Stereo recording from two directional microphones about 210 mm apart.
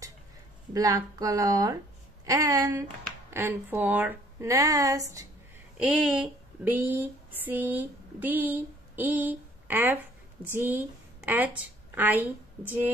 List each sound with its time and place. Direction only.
0.7 s speech: 15° right (ahead or behind)
5.8 s a sound: 5° right (ahead or behind)
10.4 s a woman's voice: 10° right (ahead or behind)